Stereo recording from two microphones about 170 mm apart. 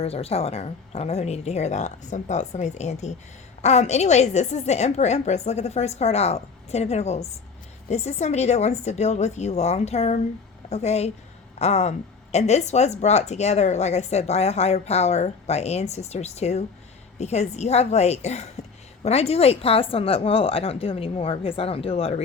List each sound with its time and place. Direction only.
0.0 s speech: 35° left (ahead or behind)